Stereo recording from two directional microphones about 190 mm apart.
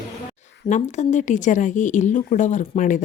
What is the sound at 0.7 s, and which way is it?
A woman's voice, 40° left (ahead or behind).